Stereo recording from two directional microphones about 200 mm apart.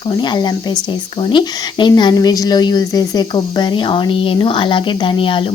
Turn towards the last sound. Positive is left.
turn(degrees=25)  # may be behind; listen again after turning